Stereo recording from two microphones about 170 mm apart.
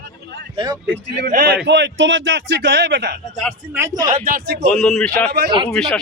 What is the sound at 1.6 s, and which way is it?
A man's voice, 90° right.